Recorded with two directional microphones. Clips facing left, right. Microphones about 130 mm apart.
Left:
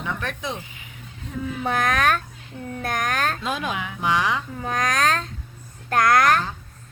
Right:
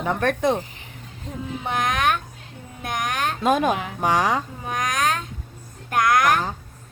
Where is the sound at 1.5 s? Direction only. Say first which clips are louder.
Left 2 dB; 20° right (ahead or behind).